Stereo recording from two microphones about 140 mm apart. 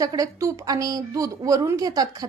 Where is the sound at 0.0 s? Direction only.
25° right (ahead or behind).